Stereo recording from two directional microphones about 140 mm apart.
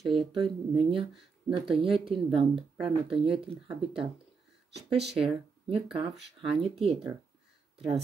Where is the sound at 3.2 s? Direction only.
40° right (ahead or behind).